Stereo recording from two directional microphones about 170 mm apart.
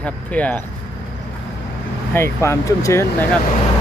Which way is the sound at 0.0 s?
5° left (ahead or behind).